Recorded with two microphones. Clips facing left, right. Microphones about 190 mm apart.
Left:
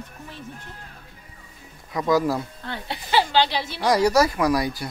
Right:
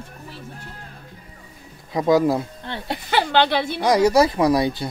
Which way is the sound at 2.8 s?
55° right (ahead or behind).